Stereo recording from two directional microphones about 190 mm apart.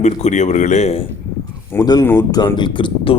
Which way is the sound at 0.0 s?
35° left (ahead or behind).